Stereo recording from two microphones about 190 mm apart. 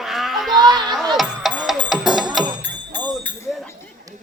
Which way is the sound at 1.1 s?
Centre (ahead or behind).